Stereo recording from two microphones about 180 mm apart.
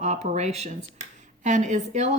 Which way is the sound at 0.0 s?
40° right (ahead or behind).